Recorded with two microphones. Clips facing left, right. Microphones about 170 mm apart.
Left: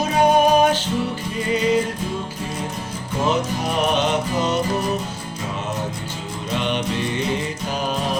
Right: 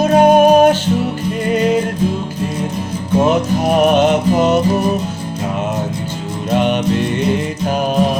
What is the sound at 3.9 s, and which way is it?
Music, 50° right (ahead or behind).